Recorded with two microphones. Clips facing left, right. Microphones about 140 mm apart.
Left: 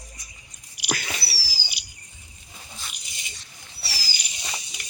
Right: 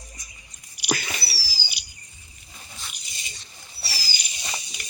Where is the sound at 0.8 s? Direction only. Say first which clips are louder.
Right 3 dB; 90° left.